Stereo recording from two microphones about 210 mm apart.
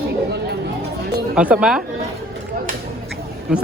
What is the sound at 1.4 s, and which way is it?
Speech, 5° right (ahead or behind).